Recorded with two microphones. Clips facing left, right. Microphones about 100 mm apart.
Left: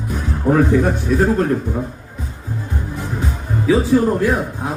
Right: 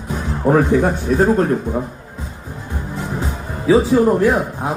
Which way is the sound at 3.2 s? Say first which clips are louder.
Left 1 dB; 20° right (ahead or behind).